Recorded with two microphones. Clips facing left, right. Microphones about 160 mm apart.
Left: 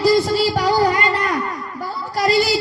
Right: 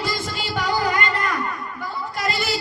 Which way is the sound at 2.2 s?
35° left (ahead or behind).